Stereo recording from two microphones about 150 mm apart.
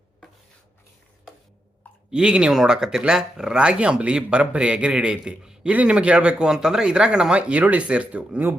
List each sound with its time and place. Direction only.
2.0 s speech: 5° right (ahead or behind)